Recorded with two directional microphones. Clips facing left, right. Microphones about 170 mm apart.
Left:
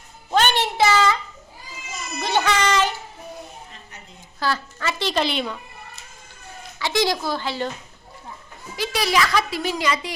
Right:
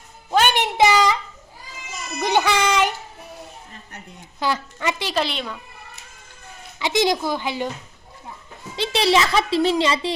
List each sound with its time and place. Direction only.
0.3 s a sound: 10° right (ahead or behind)
2.2 s child singing: 15° right (ahead or behind)
4.4 s a woman's voice: 20° right (ahead or behind); by 5.5 s centre (ahead or behind)
6.7 s a woman's voice: 20° right (ahead or behind)
8.7 s a child's voice: 25° right (ahead or behind)